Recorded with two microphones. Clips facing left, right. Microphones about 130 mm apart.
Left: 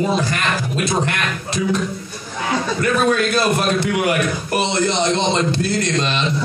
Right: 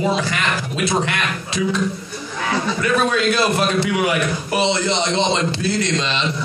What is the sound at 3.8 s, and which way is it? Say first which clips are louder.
Speech: left 1 dB; 50° left (ahead or behind).